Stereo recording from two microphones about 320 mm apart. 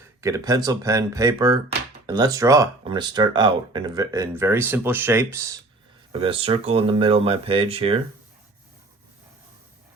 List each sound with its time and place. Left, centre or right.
0.2 s speech: centre